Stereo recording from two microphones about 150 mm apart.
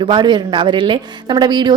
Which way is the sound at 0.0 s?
30° right (ahead or behind).